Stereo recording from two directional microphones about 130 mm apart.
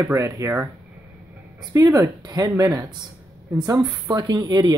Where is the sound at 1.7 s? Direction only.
25° right (ahead or behind).